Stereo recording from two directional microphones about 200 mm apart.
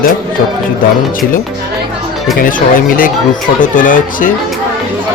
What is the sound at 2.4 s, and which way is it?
Speech, 45° left (ahead or behind).